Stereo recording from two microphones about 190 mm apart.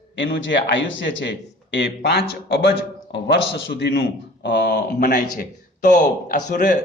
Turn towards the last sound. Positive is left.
turn(degrees=45)  # may be behind; listen again after turning